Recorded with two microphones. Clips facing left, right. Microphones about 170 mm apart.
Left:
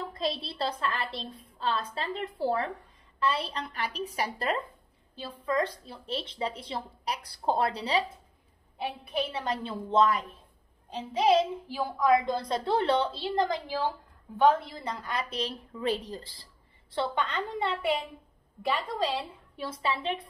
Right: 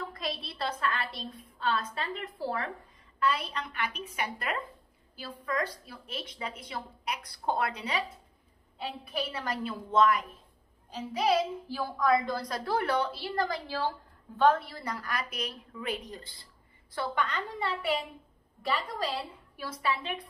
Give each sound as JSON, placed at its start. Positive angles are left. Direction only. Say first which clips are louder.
{"t": 0.1, "sound": "a child's voice", "louder": "left 5 dB", "side_deg": 30}
{"t": 19.5, "sound": "a child's voice", "louder": "left 1 dB", "side_deg": 25}